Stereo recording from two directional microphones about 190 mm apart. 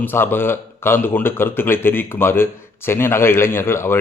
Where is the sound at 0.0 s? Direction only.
10° left (ahead or behind).